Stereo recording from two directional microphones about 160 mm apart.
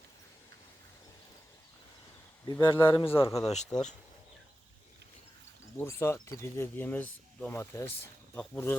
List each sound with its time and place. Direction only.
2.5 s speech: 25° left (ahead or behind)
3.7 s speech: 5° left (ahead or behind)
5.7 s speech: 15° left (ahead or behind)